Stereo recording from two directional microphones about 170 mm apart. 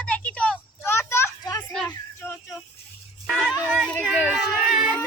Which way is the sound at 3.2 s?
Centre (ahead or behind).